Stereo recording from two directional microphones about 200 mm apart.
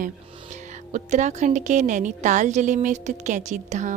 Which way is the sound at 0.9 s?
35° right (ahead or behind).